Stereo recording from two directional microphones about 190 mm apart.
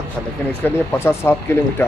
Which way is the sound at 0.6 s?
10° left (ahead or behind).